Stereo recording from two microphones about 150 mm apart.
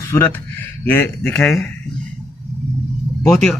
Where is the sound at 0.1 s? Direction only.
20° left (ahead or behind).